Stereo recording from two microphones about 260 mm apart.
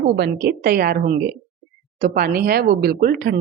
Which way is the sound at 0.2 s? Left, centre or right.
Right.